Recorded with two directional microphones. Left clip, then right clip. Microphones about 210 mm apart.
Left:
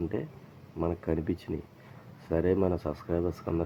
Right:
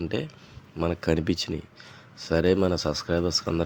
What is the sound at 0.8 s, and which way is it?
Speech, 35° right (ahead or behind).